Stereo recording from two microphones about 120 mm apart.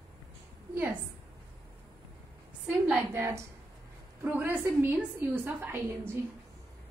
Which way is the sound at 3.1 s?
20° right (ahead or behind).